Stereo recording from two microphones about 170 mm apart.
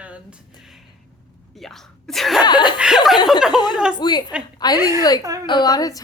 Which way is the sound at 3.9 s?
25° left (ahead or behind).